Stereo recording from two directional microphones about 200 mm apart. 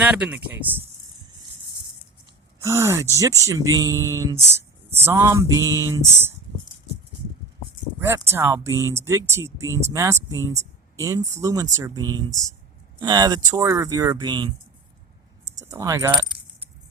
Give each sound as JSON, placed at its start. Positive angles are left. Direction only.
{"t": 0.0, "sound": "speech", "side_deg": -5}
{"t": 2.6, "sound": "speech", "side_deg": -15}
{"t": 7.9, "sound": "speech", "side_deg": -15}
{"t": 15.5, "sound": "speech", "side_deg": -15}